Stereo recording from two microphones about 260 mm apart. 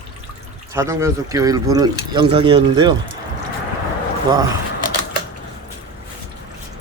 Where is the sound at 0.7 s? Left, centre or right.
Centre.